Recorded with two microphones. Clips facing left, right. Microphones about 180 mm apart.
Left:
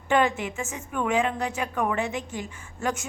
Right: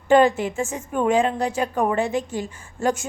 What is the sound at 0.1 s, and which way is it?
A woman's voice, 30° right (ahead or behind).